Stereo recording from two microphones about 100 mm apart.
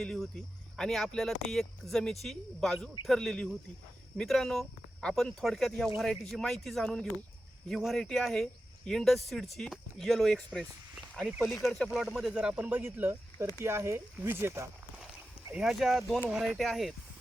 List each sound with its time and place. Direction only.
0.0 s speech: 5° left (ahead or behind); by 14.7 s 25° right (ahead or behind)
15.5 s speech: 5° right (ahead or behind)